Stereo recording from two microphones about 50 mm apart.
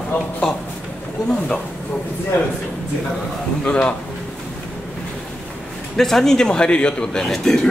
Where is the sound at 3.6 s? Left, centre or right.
Centre.